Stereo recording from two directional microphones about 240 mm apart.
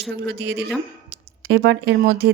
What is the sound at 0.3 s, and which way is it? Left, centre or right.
Speech, right.